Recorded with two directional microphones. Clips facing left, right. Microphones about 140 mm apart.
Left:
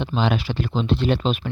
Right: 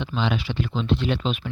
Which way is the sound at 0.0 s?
45° left (ahead or behind).